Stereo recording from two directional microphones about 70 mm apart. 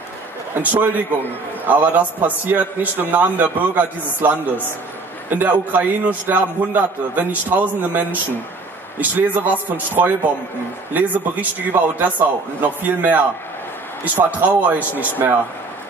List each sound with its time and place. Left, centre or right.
0.6 s a man's voice: right